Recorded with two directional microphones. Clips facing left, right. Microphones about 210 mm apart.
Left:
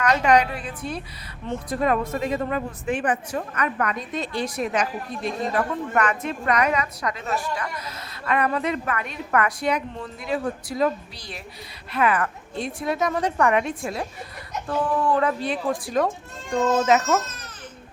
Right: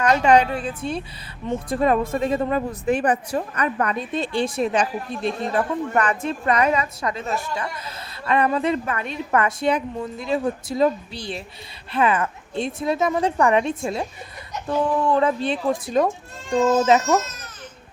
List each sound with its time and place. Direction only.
0.0 s speech: 30° right (ahead or behind)